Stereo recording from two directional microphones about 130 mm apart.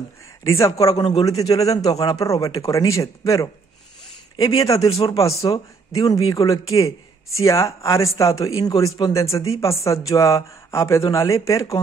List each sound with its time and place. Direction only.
0.9 s a man's voice: 40° left (ahead or behind)
1.4 s speech: 25° left (ahead or behind)
4.7 s speech: 50° left (ahead or behind)
5.9 s speech: 30° left (ahead or behind)